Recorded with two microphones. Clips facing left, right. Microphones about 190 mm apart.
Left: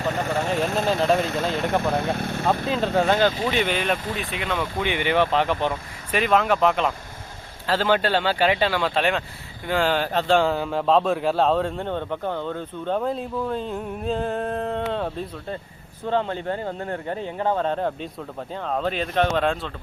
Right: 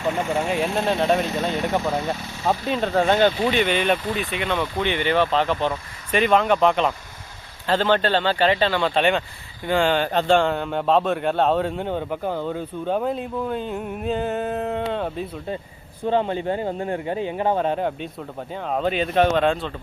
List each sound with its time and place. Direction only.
0.5 s speech: 5° right (ahead or behind)
2.1 s speech: 60° left (ahead or behind)
2.6 s speech: centre (ahead or behind)
16.0 s speech: 15° right (ahead or behind); by 19.7 s centre (ahead or behind)